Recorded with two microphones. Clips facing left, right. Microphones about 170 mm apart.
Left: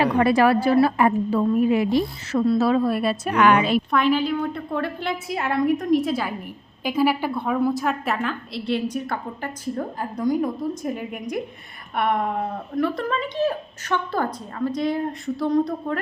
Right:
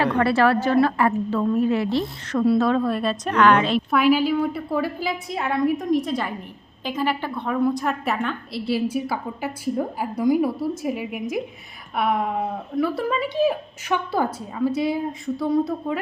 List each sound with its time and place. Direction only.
0.0 s a woman's voice: 15° left (ahead or behind)
3.9 s a woman's voice: 5° right (ahead or behind)